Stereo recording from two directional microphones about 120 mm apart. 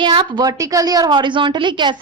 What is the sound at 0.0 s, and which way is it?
A woman's voice, 40° right (ahead or behind).